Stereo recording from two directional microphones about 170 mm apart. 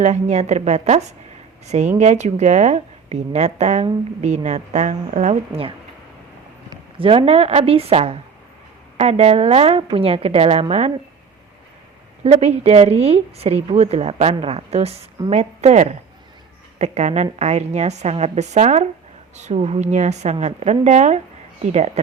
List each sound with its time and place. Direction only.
0.0 s a woman's voice: 40° right (ahead or behind)
7.0 s a woman's voice: 30° right (ahead or behind)
12.2 s a woman's voice: 35° right (ahead or behind)